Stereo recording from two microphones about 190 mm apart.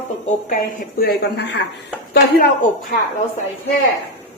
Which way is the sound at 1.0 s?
60° left (ahead or behind).